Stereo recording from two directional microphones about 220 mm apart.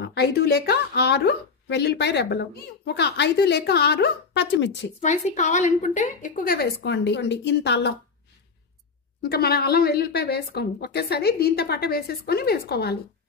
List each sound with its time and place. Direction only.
0.0 s a woman's voice: 45° left (ahead or behind)
5.0 s a woman's voice: 30° left (ahead or behind); by 7.9 s 50° left (ahead or behind)
9.2 s a woman's voice: 45° left (ahead or behind)